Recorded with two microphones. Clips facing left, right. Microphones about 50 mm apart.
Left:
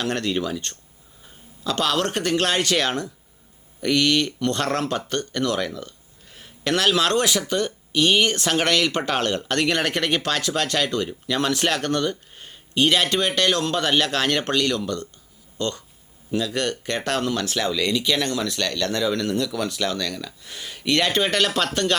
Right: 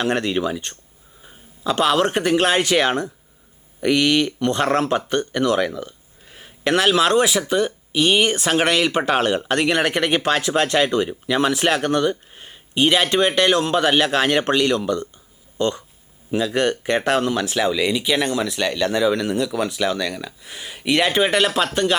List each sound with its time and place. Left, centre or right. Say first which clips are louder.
0.0 s a man's voice: right 4 dB; centre